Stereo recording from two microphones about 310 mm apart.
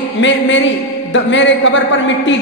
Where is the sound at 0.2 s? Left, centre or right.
Left.